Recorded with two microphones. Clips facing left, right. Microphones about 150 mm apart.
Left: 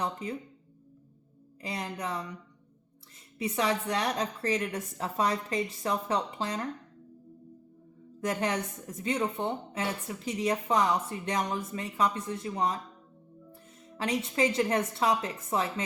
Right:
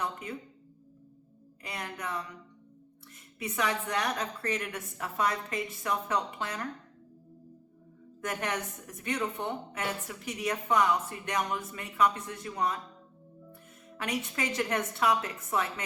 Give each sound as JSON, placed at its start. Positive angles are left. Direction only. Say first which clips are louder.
{"t": 0.0, "sound": "a woman's voice", "louder": "left 2 dB", "side_deg": 30}
{"t": 1.6, "sound": "a woman's voice", "louder": "left 3 dB", "side_deg": 25}
{"t": 3.3, "sound": "a woman's voice", "louder": "left 3 dB", "side_deg": 30}
{"t": 8.2, "sound": "a woman's voice", "louder": "left 4 dB", "side_deg": 30}